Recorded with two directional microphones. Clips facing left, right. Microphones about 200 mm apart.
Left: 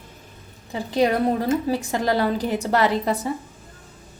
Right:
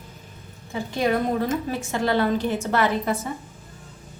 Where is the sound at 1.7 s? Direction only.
35° left (ahead or behind).